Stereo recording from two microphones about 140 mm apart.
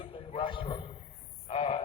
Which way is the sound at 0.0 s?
40° left (ahead or behind).